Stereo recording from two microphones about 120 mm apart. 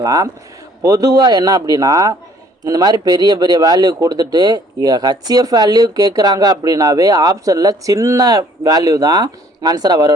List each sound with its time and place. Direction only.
0.0 s a man's voice: 30° right (ahead or behind)